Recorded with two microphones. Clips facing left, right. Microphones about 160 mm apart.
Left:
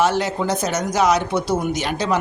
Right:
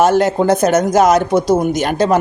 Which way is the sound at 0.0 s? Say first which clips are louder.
Right 7 dB; 50° right (ahead or behind).